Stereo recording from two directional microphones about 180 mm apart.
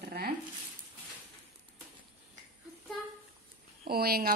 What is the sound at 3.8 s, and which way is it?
Speech, 55° right (ahead or behind).